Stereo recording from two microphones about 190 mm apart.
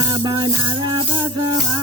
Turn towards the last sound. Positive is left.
turn(degrees=-25)  # may be behind; listen again after turning